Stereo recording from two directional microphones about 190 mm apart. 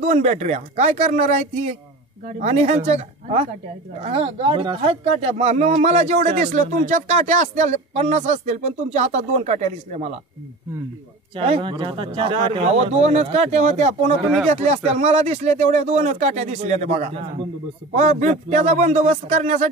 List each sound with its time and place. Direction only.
0.0 s speech: 40° right (ahead or behind)
11.3 s speech: 30° right (ahead or behind)